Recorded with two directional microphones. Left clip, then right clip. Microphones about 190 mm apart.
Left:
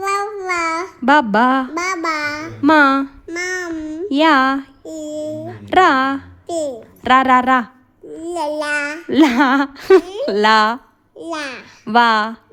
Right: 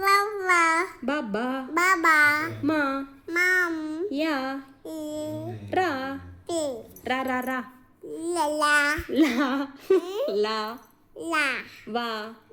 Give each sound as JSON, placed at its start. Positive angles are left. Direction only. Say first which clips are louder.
{"t": 0.0, "sound": "child singing", "louder": "left 2 dB", "side_deg": 15}
{"t": 1.0, "sound": "a woman's voice", "louder": "left 16 dB", "side_deg": 55}
{"t": 1.7, "sound": "a child's voice", "louder": "even", "side_deg": 15}
{"t": 2.6, "sound": "a woman's voice", "louder": "left 17 dB", "side_deg": 55}
{"t": 3.2, "sound": "child singing", "louder": "even", "side_deg": 15}
{"t": 4.1, "sound": "a sound", "louder": "left 17 dB", "side_deg": 55}
{"t": 4.8, "sound": "child singing", "louder": "left 7 dB", "side_deg": 15}
{"t": 5.6, "sound": "a woman's voice", "louder": "left 14 dB", "side_deg": 55}
{"t": 6.5, "sound": "a child's voice", "louder": "left 7 dB", "side_deg": 10}
{"t": 7.0, "sound": "a woman's voice", "louder": "left 16 dB", "side_deg": 55}
{"t": 8.2, "sound": "babbling", "louder": "left 3 dB", "side_deg": 5}
{"t": 9.1, "sound": "a sound", "louder": "left 14 dB", "side_deg": 50}
{"t": 11.2, "sound": "a child's voice", "louder": "even", "side_deg": 10}
{"t": 11.9, "sound": "a woman's voice", "louder": "left 18 dB", "side_deg": 55}